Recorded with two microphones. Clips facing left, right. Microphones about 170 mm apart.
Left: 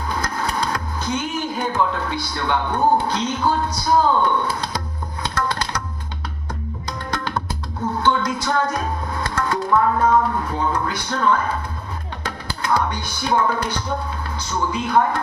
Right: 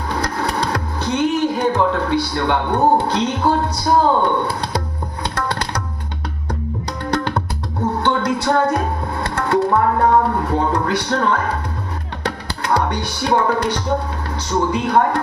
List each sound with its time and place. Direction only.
0.1 s a sound: 70° right (ahead or behind)
3.0 s speech: 70° right (ahead or behind)
4.4 s music: 65° right (ahead or behind)
7.0 s music: 65° right (ahead or behind)
10.0 s speech: 65° right (ahead or behind)
12.2 s music: 70° right (ahead or behind)
14.4 s speech: 70° right (ahead or behind)